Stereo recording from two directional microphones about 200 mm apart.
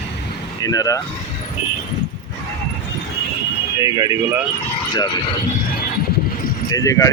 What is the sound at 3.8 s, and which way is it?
Speech, 15° right (ahead or behind).